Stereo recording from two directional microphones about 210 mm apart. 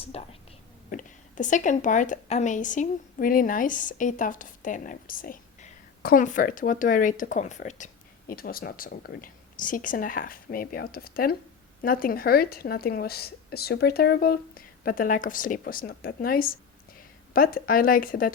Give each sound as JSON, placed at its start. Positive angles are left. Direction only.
{"t": 0.0, "sound": "a woman's voice", "side_deg": 30}